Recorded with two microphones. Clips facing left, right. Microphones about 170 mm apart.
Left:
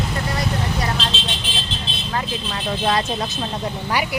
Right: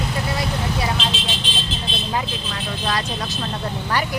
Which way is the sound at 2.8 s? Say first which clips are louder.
Left 4 dB; 25° left (ahead or behind).